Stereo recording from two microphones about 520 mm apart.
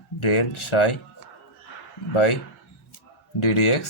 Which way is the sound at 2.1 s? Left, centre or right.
Left.